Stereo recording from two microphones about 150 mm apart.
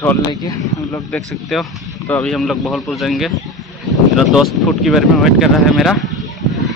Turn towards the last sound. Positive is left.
turn(degrees=0)  # may be behind; listen again after turning